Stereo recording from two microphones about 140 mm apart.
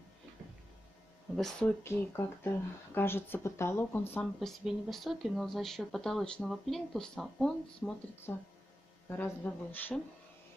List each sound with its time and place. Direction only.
1.3 s speech: centre (ahead or behind)
1.8 s speech: 15° left (ahead or behind)
4.4 s speech: centre (ahead or behind)